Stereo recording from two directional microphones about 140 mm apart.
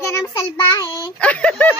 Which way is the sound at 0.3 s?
25° left (ahead or behind).